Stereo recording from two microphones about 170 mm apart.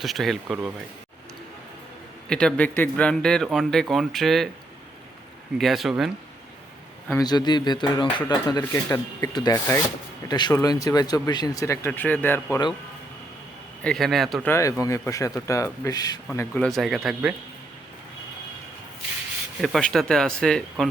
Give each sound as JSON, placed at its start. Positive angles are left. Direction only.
{"t": 0.0, "sound": "speech", "side_deg": 0}
{"t": 2.3, "sound": "speech", "side_deg": 5}
{"t": 5.5, "sound": "speech", "side_deg": 0}
{"t": 7.1, "sound": "speech", "side_deg": 25}
{"t": 13.8, "sound": "speech", "side_deg": 0}
{"t": 14.4, "sound": "speech", "side_deg": 15}
{"t": 16.6, "sound": "speech", "side_deg": 0}
{"t": 19.6, "sound": "speech", "side_deg": 0}